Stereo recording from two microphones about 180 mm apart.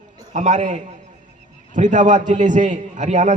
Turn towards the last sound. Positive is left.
turn(degrees=-45)  # may be behind; listen again after turning